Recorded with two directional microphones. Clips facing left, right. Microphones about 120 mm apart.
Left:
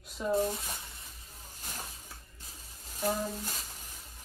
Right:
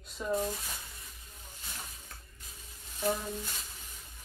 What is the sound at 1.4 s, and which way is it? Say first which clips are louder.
Snake: left 3 dB; 40° left (ahead or behind).